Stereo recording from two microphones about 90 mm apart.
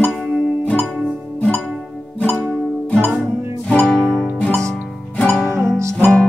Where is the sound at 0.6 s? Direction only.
15° left (ahead or behind).